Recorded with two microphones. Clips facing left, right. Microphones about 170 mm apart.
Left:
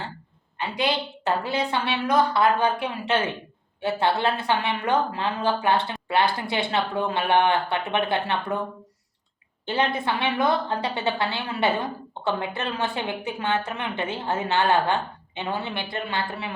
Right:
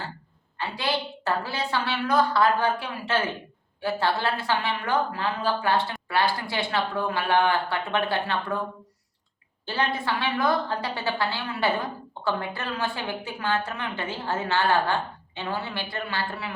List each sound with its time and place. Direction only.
0.6 s a woman's voice: 20° left (ahead or behind)
9.6 s a woman's voice: 20° left (ahead or behind)